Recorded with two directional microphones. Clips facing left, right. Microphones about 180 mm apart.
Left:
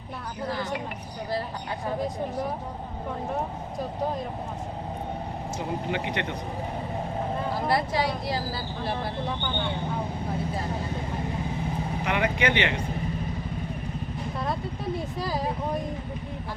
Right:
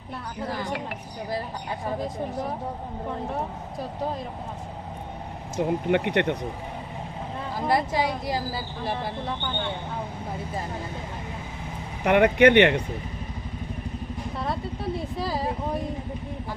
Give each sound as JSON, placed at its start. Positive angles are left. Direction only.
{"t": 5.5, "sound": "speech", "side_deg": -60}
{"t": 7.7, "sound": "speech", "side_deg": -15}
{"t": 12.0, "sound": "speech", "side_deg": -60}
{"t": 14.3, "sound": "vehicle", "side_deg": 0}
{"t": 15.2, "sound": "speech", "side_deg": 0}